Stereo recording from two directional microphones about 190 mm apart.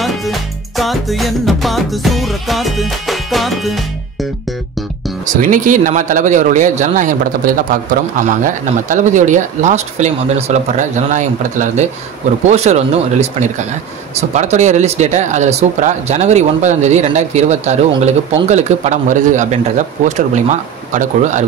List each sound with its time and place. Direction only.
0.0 s music: centre (ahead or behind)
5.2 s speech: 45° right (ahead or behind)